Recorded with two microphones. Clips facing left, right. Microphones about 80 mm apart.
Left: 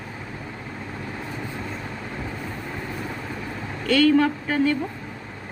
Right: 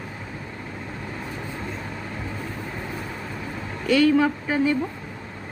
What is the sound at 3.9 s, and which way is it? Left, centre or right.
Speech, centre.